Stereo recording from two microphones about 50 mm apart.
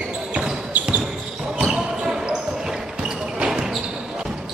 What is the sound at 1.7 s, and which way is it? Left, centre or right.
Basketball bounce, centre.